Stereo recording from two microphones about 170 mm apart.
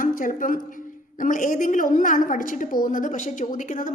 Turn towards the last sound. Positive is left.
turn(degrees=50)  # may be behind; listen again after turning